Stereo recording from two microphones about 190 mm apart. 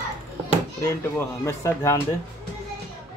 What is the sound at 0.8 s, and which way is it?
Speech, 15° left (ahead or behind).